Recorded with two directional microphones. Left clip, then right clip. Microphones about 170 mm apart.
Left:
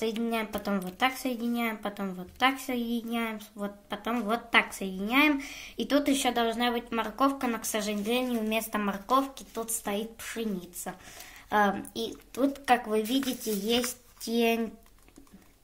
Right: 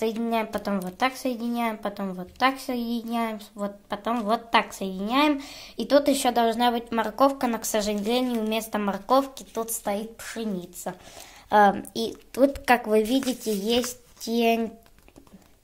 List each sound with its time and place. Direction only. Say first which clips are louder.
0.2 s a woman's voice: right 5 dB; 15° right (ahead or behind); by 9.9 s 40° right (ahead or behind)
9.9 s a woman's voice: right 2 dB; 25° right (ahead or behind)
12.4 s speech: right 5 dB; 40° right (ahead or behind); by 14.7 s 20° right (ahead or behind)